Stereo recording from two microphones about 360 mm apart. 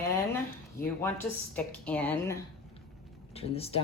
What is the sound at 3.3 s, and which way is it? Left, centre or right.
Speech, centre.